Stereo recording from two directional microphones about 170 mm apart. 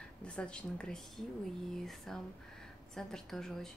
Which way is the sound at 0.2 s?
5° left (ahead or behind).